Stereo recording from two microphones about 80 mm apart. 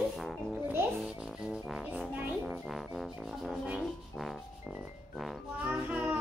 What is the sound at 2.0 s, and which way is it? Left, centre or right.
Music, centre.